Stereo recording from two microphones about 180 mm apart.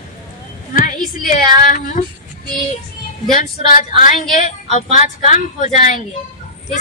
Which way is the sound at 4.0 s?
45° left (ahead or behind).